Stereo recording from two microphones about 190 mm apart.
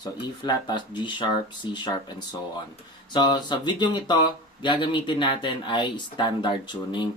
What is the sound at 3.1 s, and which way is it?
Speech, 20° left (ahead or behind).